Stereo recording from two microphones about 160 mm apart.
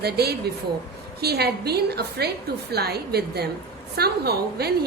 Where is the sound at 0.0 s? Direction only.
85° right.